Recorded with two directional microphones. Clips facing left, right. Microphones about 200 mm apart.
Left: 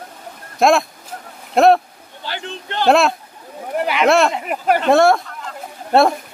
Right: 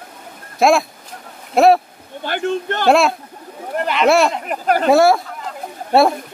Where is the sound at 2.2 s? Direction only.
55° right (ahead or behind).